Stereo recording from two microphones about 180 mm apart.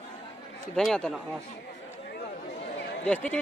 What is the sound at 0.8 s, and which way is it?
Speech, centre (ahead or behind).